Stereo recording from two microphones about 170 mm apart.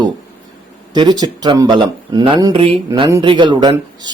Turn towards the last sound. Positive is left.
turn(degrees=-25)  # may be behind; listen again after turning